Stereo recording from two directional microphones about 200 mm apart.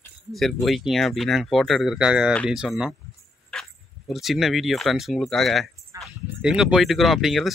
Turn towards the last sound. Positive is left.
turn(degrees=0)  # may be behind; listen again after turning